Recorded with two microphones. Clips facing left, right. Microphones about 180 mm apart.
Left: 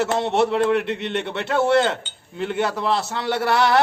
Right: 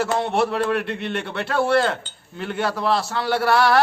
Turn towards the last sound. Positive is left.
turn(degrees=20)  # may be behind; listen again after turning